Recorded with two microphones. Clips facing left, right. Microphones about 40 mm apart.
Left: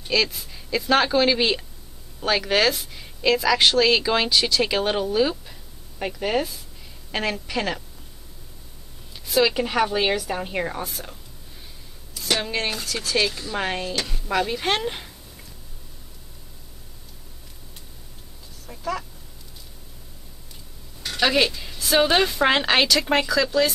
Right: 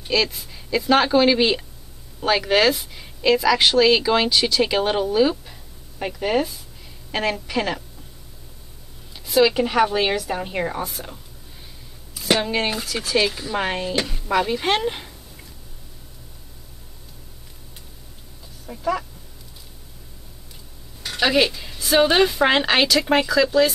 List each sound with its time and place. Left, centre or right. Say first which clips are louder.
0.1 s speech: right 1 dB; centre
9.1 s speech: right 3 dB; centre
18.7 s speech: right 5 dB; centre
21.0 s speech: right 2 dB; centre